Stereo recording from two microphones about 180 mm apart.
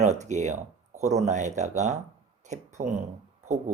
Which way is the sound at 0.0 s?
40° right (ahead or behind).